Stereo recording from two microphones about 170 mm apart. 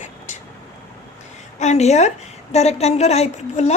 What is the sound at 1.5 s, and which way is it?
A woman's voice, 40° left (ahead or behind).